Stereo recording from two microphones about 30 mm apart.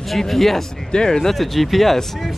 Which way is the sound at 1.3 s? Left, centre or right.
Centre.